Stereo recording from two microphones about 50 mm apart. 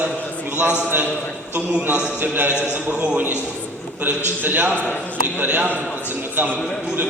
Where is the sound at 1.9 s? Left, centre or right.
Right.